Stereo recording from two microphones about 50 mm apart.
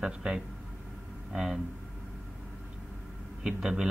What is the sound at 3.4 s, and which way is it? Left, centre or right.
Speech, centre.